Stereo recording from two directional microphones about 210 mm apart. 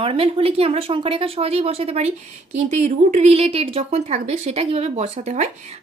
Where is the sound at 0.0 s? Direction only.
25° right (ahead or behind).